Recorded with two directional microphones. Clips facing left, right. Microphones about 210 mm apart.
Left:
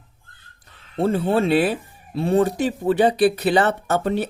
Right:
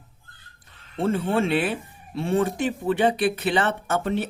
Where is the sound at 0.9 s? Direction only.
35° left (ahead or behind).